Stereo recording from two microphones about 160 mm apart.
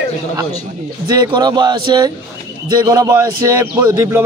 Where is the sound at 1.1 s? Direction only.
25° right (ahead or behind).